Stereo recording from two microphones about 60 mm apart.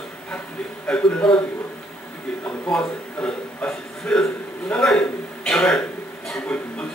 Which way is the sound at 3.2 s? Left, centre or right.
Centre.